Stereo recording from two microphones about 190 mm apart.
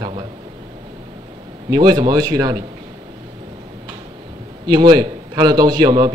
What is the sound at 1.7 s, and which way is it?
Speech, 20° right (ahead or behind).